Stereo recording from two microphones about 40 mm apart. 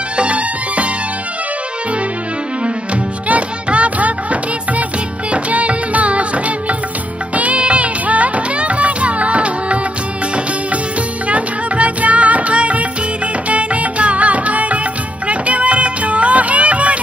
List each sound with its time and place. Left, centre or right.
0.2 s music: right
2.6 s music: right
11.2 s music: right